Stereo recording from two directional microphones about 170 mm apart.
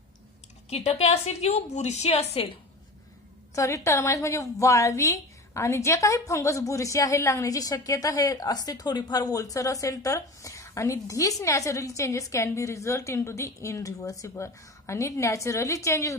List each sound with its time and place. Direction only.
0.7 s a woman's voice: 40° left (ahead or behind)
3.5 s a woman's voice: 20° left (ahead or behind)